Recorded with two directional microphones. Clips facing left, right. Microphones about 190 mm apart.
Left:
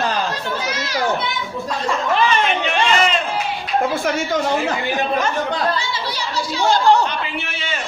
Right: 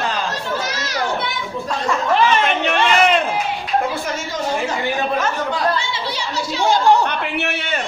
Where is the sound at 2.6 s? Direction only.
60° right (ahead or behind).